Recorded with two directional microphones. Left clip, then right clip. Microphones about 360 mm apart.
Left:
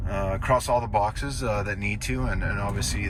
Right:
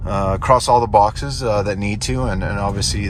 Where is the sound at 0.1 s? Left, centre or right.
Centre.